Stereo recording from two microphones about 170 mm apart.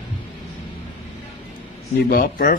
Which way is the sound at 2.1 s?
55° left (ahead or behind).